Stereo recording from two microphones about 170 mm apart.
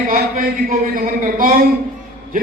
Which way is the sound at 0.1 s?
55° right (ahead or behind).